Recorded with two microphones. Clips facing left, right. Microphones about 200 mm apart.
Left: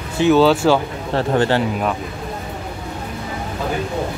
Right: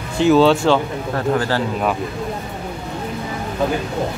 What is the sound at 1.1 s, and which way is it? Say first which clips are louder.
Speech: left 3 dB; 25° left (ahead or behind).